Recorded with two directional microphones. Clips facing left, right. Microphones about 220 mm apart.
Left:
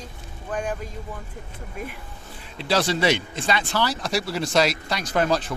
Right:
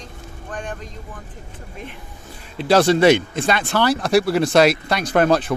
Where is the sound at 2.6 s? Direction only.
50° right (ahead or behind).